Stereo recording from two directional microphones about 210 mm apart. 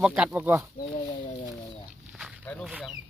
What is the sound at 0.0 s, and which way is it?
Speech, 5° right (ahead or behind).